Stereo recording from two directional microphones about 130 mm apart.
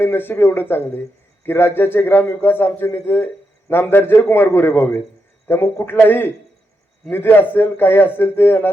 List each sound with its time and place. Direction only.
0.0 s a man's voice: 15° left (ahead or behind)